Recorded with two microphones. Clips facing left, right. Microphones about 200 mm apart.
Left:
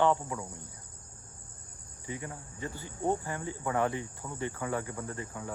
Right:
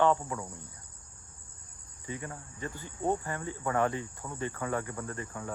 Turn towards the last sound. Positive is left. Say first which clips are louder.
# even
turn(degrees=15)  # may be behind; listen again after turning